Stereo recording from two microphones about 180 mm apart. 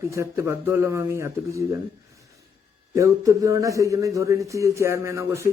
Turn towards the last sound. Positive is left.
turn(degrees=-15)  # may be behind; listen again after turning